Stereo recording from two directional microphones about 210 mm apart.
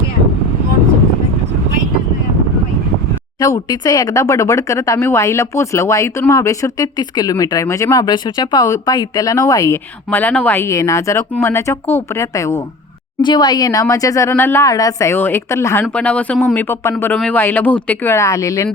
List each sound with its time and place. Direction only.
3.4 s speech: 20° left (ahead or behind)